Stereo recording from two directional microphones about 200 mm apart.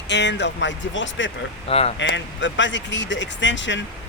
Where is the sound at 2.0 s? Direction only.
65° left (ahead or behind).